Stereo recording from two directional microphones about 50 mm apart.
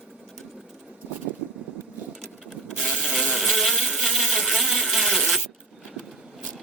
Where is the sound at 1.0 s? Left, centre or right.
Right.